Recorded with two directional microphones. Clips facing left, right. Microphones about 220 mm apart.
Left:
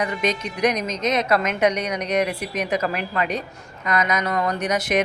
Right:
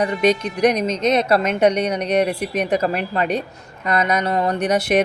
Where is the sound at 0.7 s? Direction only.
30° right (ahead or behind).